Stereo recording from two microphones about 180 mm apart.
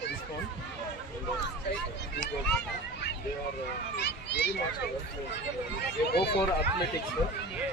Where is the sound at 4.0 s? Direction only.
70° left (ahead or behind).